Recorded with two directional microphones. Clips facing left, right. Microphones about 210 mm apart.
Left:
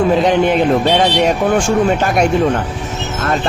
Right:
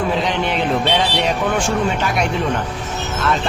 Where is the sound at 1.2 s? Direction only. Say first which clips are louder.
Left 5 dB; 45° left (ahead or behind).